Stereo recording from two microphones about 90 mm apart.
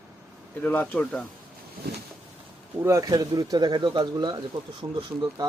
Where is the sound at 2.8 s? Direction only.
40° right (ahead or behind).